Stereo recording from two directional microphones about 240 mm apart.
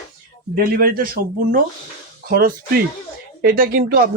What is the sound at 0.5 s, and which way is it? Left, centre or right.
A man's voice, right.